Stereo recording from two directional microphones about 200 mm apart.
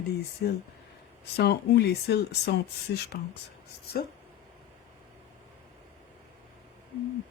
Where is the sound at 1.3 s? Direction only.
55° left (ahead or behind).